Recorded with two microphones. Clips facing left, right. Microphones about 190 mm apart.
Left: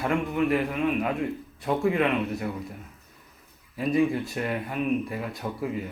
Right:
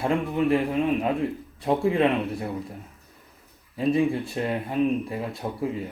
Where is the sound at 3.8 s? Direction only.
30° right (ahead or behind).